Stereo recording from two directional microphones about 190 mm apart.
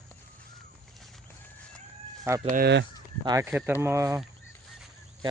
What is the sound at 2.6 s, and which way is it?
Speech, 60° right (ahead or behind).